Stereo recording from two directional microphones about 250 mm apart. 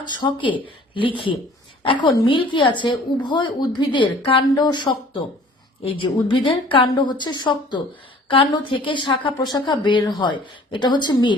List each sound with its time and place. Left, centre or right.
0.0 s speech: centre